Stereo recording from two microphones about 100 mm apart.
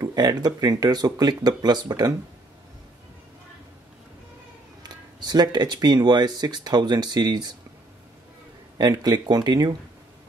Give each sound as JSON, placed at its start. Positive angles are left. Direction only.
{"t": 0.0, "sound": "speech", "side_deg": -40}
{"t": 4.8, "sound": "speech", "side_deg": -45}
{"t": 8.7, "sound": "speech", "side_deg": -40}